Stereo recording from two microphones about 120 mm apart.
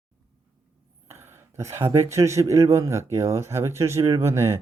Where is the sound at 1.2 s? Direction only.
25° right (ahead or behind).